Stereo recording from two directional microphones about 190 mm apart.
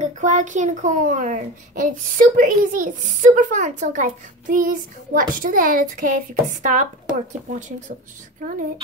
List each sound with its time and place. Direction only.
0.0 s a woman's voice: 40° right (ahead or behind)